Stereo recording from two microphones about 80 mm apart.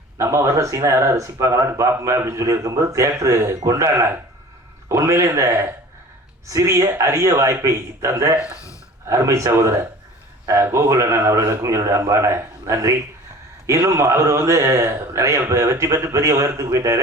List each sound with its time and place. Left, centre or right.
0.2 s speech: right
8.4 s speech: left
9.0 s speech: right